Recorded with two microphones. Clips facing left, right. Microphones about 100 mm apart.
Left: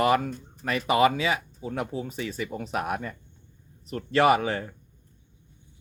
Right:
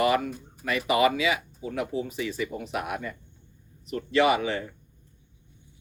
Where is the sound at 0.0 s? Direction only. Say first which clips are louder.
Left 1 dB; 40° left (ahead or behind).